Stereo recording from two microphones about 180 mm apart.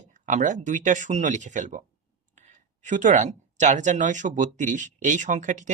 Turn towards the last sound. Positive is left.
turn(degrees=-40)  # may be behind; listen again after turning